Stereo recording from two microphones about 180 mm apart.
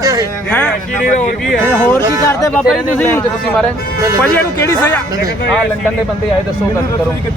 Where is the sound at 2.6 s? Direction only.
5° left (ahead or behind).